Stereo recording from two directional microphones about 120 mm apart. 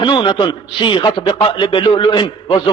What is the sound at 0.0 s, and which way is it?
A man's voice, 45° left (ahead or behind).